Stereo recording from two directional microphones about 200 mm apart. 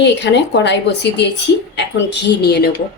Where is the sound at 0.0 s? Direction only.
60° left (ahead or behind).